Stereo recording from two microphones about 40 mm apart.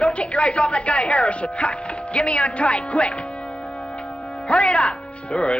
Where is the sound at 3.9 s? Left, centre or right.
Left.